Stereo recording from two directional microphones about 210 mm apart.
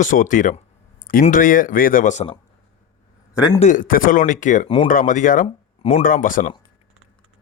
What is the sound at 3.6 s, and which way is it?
Speech, 35° left (ahead or behind).